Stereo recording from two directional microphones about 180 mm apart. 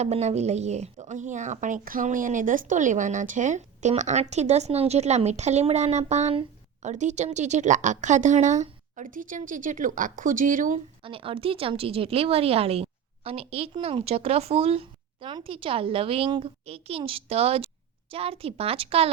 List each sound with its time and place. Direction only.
0.0 s a woman's voice: 35° right (ahead or behind)
11.0 s a woman's voice: 30° right (ahead or behind)